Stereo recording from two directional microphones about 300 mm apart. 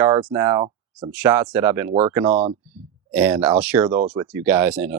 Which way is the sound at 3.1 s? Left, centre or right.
Centre.